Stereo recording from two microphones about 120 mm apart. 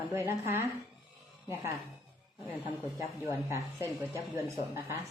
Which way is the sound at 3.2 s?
25° right (ahead or behind).